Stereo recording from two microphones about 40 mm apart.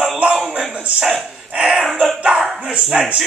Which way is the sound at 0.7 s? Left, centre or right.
Right.